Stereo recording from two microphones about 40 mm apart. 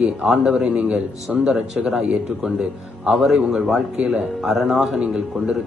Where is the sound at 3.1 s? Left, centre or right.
Centre.